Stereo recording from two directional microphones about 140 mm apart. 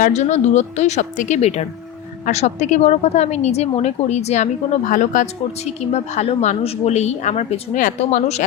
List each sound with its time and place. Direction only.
0.0 s a woman's voice: 55° left (ahead or behind)
4.9 s speech: 65° left (ahead or behind)
5.8 s a woman's voice: 55° left (ahead or behind)
7.8 s speech: 70° left (ahead or behind)